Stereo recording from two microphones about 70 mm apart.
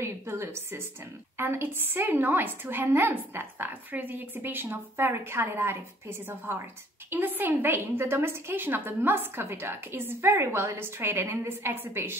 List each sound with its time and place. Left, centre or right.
0.0 s a woman's voice: right